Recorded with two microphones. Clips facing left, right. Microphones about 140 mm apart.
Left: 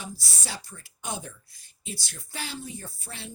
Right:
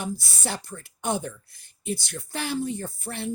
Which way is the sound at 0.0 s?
60° right (ahead or behind).